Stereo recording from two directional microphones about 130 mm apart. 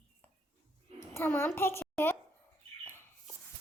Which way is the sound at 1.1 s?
20° left (ahead or behind).